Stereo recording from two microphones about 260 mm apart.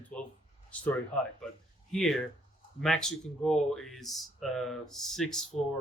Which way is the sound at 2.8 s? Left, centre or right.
Centre.